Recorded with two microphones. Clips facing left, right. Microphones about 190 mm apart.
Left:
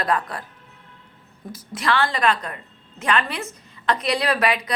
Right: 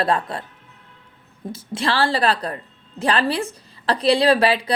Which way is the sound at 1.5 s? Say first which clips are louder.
Even; 30° right (ahead or behind).